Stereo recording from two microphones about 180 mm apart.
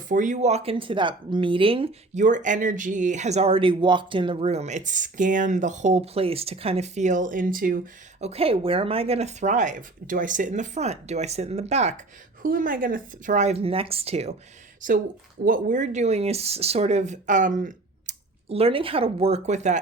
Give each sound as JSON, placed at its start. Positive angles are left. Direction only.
{"t": 0.1, "sound": "speech", "side_deg": -45}
{"t": 8.2, "sound": "speech", "side_deg": -35}
{"t": 12.4, "sound": "speech", "side_deg": -50}
{"t": 14.8, "sound": "speech", "side_deg": -50}